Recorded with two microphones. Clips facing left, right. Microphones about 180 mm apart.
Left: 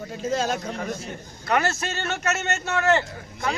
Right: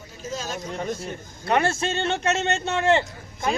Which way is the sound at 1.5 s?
25° right (ahead or behind).